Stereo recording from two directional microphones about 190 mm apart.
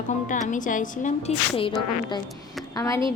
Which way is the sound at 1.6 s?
25° left (ahead or behind).